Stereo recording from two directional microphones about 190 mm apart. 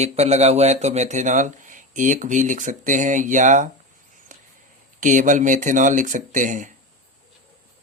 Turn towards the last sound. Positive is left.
turn(degrees=-40)  # may be behind; listen again after turning